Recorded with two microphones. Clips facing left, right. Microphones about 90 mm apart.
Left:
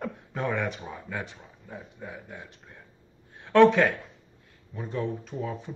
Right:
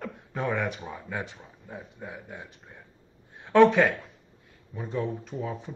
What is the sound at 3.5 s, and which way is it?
Speech, 5° right (ahead or behind).